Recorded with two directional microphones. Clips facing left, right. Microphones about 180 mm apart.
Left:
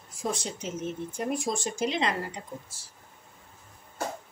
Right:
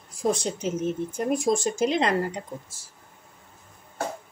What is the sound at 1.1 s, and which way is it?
Speech, 40° right (ahead or behind).